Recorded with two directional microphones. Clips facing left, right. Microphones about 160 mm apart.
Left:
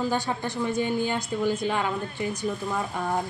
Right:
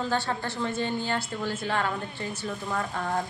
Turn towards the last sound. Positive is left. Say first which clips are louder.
# left 1 dB
turn(degrees=10)  # may be behind; listen again after turning